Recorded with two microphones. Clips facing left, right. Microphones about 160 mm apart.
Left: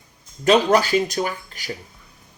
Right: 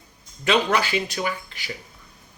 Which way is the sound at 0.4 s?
40° left (ahead or behind).